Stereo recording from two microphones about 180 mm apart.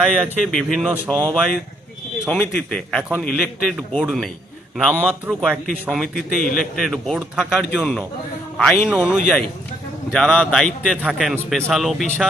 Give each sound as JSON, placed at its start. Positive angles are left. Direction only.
{"t": 0.0, "sound": "a man's voice", "side_deg": 5}
{"t": 2.2, "sound": "a man's voice", "side_deg": 5}
{"t": 5.3, "sound": "a man's voice", "side_deg": 0}